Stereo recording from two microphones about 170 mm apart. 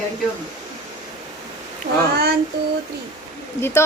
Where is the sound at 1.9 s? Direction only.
45° right (ahead or behind).